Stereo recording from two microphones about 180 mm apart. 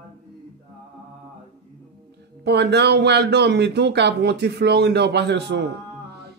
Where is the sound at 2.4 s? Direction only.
70° right (ahead or behind).